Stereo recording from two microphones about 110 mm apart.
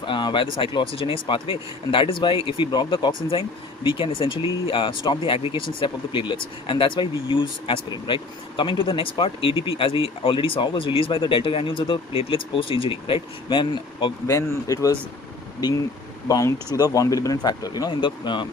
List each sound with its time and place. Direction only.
0.0 s a sound: 45° left (ahead or behind)
0.6 s speech: 45° left (ahead or behind)
0.9 s speech: 55° left (ahead or behind)
14.3 s speech: 30° left (ahead or behind)
16.3 s speech: 25° left (ahead or behind); by 18.4 s 45° left (ahead or behind)